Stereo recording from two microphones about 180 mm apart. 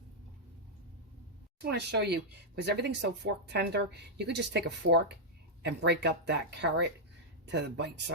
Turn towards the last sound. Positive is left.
turn(degrees=-70)  # may be behind; listen again after turning